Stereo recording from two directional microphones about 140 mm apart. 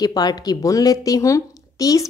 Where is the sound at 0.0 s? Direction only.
30° left (ahead or behind).